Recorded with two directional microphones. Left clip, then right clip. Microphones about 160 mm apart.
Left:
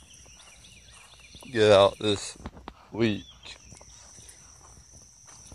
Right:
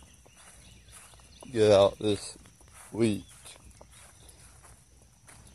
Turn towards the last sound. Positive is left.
turn(degrees=0)  # may be behind; listen again after turning